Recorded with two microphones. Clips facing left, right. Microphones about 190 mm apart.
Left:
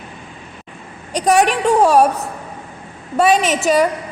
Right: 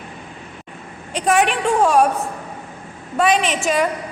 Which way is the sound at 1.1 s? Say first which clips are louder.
Left 3 dB; 40° left (ahead or behind).